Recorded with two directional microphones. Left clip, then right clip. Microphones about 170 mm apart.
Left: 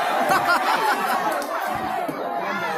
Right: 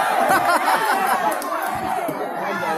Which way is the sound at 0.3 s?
35° right (ahead or behind).